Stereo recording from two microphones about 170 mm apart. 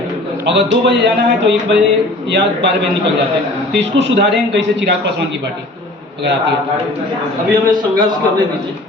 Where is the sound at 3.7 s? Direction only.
90° right.